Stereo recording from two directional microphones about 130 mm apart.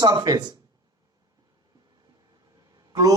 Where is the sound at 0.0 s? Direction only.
30° right (ahead or behind).